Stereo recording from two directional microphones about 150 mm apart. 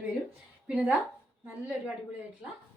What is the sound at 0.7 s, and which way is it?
Speech, 5° right (ahead or behind).